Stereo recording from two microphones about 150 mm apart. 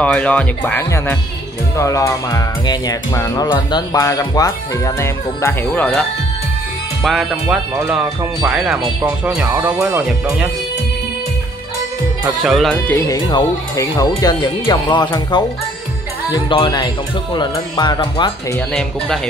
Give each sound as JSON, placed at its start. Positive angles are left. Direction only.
{"t": 0.0, "sound": "speech", "side_deg": 10}
{"t": 1.8, "sound": "music", "side_deg": 20}
{"t": 7.0, "sound": "speech", "side_deg": 0}
{"t": 7.7, "sound": "speech", "side_deg": -10}
{"t": 12.4, "sound": "speech", "side_deg": 0}
{"t": 13.1, "sound": "music", "side_deg": 25}
{"t": 16.4, "sound": "speech", "side_deg": 35}
{"t": 18.7, "sound": "speech", "side_deg": 5}